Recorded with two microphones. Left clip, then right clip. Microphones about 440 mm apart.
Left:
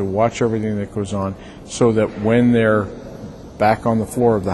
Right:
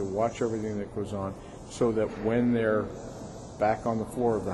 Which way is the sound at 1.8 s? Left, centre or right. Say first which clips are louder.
Left 10 dB; left.